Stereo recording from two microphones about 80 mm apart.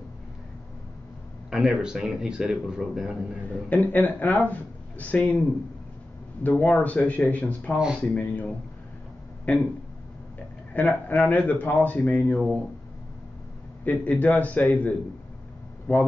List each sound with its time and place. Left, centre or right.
1.5 s speech: centre
3.7 s speech: left
6.4 s speech: centre
7.7 s speech: centre
8.1 s speech: centre
10.7 s speech: centre
13.8 s speech: centre